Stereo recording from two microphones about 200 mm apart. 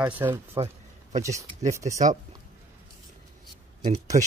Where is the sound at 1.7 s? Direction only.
15° right (ahead or behind).